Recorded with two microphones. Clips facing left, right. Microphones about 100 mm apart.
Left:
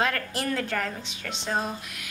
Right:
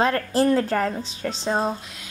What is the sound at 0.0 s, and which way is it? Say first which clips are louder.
A woman's voice: right 8 dB; 35° right (ahead or behind).